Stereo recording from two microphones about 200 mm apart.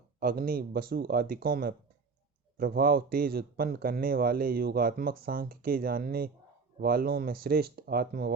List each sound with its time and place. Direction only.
0.2 s a man's voice: 50° right (ahead or behind)